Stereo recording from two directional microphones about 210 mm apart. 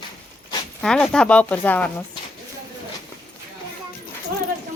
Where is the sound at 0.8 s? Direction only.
5° left (ahead or behind).